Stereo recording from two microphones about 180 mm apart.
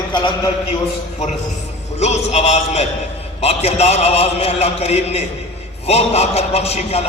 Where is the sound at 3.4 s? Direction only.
35° left (ahead or behind).